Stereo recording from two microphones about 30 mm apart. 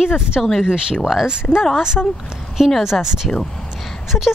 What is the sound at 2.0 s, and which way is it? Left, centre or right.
Speech, left.